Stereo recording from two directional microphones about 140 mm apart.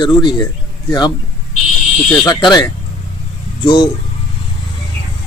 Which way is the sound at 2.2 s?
25° left (ahead or behind).